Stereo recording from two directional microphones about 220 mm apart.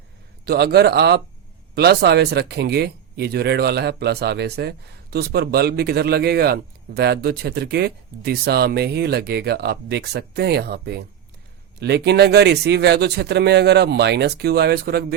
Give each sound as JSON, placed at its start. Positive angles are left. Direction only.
{"t": 0.4, "sound": "a man's voice", "side_deg": -45}